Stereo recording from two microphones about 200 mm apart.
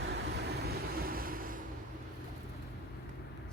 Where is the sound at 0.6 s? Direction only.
45° right (ahead or behind).